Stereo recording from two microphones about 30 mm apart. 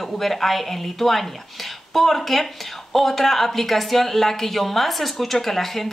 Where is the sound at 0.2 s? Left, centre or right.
Centre.